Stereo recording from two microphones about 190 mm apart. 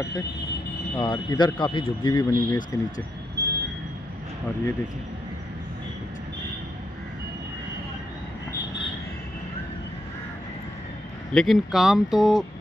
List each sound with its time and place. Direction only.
0.9 s speech: 25° left (ahead or behind)
3.4 s train: 60° right (ahead or behind)
11.3 s speech: centre (ahead or behind)